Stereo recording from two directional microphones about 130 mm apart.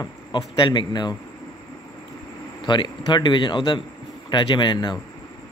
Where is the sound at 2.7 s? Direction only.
35° left (ahead or behind).